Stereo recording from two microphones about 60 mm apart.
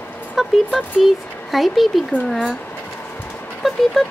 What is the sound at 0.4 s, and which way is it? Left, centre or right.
A woman's voice, centre.